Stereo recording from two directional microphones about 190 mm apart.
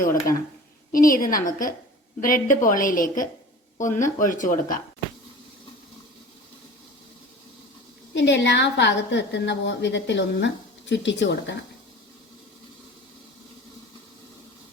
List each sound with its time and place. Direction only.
0.9 s a woman's voice: 45° left (ahead or behind)
8.1 s a woman's voice: 70° left (ahead or behind)